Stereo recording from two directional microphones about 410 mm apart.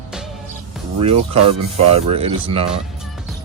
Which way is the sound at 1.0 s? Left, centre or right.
Centre.